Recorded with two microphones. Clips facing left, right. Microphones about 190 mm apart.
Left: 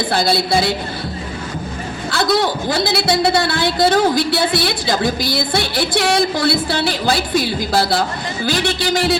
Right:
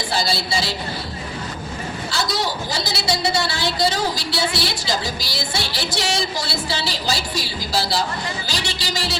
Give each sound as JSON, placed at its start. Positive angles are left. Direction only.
{"t": 0.1, "sound": "a man's voice", "side_deg": 55}
{"t": 2.0, "sound": "a man's voice", "side_deg": 55}